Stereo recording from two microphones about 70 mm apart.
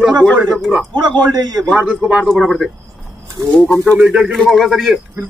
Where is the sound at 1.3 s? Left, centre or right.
Right.